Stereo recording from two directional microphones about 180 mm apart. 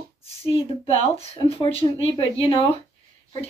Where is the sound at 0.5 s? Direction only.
30° left (ahead or behind).